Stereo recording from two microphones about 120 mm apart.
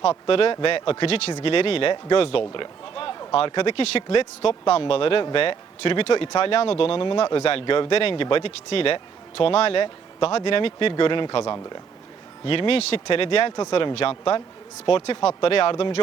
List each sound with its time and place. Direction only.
0.0 s speech: 50° left (ahead or behind)
13.6 s speech: 40° left (ahead or behind)
13.9 s speech: 50° left (ahead or behind)